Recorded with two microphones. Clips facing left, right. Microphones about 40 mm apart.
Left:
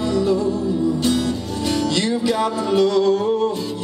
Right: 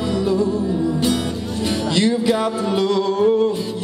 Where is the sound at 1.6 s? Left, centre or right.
Centre.